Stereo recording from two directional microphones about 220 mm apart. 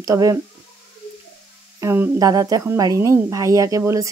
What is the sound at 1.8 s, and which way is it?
Speech, 10° right (ahead or behind).